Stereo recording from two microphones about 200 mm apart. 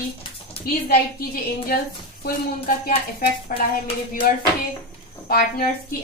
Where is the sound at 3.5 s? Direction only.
40° left (ahead or behind).